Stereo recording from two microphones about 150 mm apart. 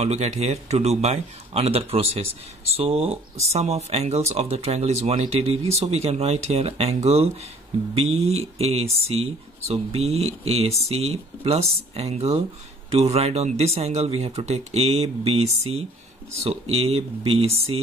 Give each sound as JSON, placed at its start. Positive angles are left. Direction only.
{"t": 0.0, "sound": "speech", "side_deg": -45}